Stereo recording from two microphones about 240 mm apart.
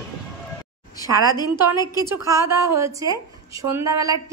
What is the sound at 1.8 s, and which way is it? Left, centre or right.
Speech, centre.